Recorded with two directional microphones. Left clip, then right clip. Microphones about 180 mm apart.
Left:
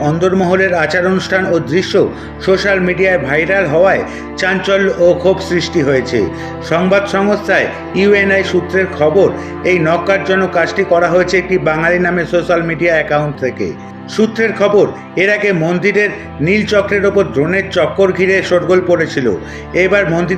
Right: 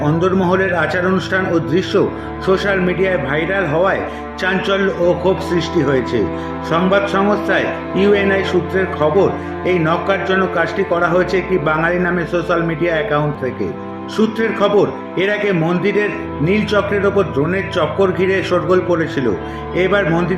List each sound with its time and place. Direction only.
0.0 s speech: 15° left (ahead or behind)